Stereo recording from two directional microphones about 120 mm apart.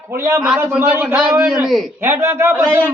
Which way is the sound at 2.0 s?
20° right (ahead or behind).